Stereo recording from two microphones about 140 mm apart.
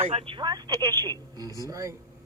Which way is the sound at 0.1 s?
40° right (ahead or behind).